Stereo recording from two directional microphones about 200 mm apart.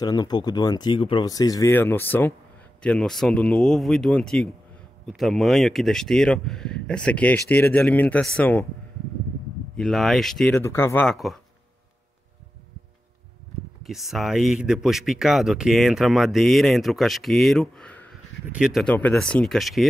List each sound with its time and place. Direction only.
0.0 s speech: 20° left (ahead or behind)
9.8 s speech: centre (ahead or behind)
13.8 s speech: centre (ahead or behind)